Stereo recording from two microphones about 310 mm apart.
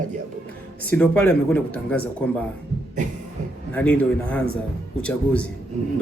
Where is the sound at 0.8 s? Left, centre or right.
Centre.